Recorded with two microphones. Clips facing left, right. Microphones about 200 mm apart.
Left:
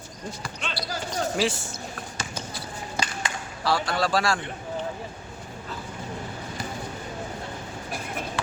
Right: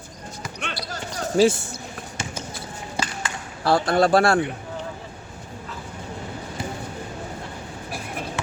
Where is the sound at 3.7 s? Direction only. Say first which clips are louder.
Right 7 dB; 55° right (ahead or behind).